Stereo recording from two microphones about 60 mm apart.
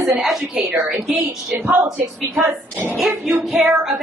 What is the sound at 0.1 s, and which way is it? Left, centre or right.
A woman's voice, centre.